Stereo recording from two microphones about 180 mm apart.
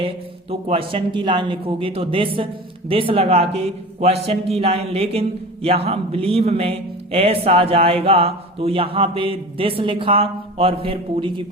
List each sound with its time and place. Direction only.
0.7 s speech: 30° right (ahead or behind)